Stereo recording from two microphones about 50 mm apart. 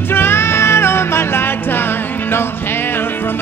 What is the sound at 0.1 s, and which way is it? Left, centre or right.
Music, left.